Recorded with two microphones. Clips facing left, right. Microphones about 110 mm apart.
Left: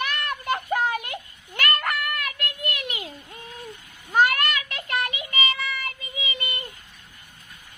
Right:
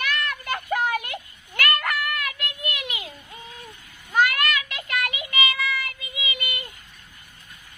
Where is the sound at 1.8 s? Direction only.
40° left (ahead or behind).